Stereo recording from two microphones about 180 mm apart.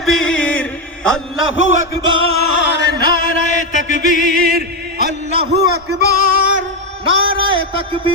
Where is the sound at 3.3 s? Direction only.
45° left (ahead or behind).